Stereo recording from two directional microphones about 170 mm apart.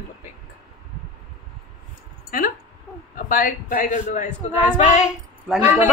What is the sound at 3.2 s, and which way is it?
A man's voice, 55° left (ahead or behind).